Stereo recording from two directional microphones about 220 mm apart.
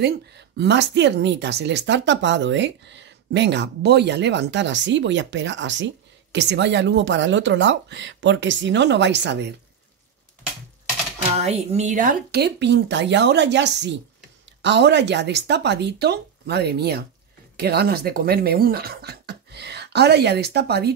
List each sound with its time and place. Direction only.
0.0 s speech: 50° right (ahead or behind)
11.4 s speech: 30° right (ahead or behind); by 20.9 s 50° right (ahead or behind)